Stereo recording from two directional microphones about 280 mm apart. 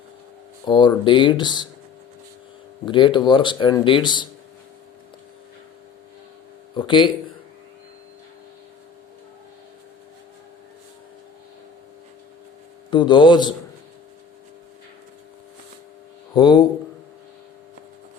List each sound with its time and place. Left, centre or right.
0.6 s speech: centre
2.8 s speech: centre
6.7 s speech: centre
12.9 s speech: centre
16.3 s speech: centre